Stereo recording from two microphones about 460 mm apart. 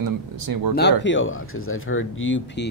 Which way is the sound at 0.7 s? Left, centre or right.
Left.